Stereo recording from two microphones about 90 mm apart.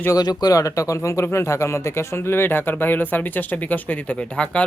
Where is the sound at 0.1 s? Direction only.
50° left (ahead or behind).